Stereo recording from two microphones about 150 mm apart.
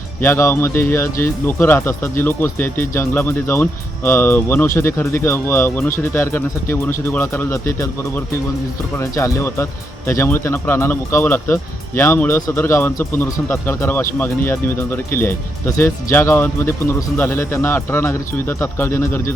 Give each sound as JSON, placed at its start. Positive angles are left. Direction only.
{"t": 0.2, "sound": "speech", "side_deg": 15}